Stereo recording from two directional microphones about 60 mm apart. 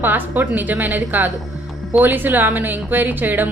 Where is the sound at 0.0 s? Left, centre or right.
Right.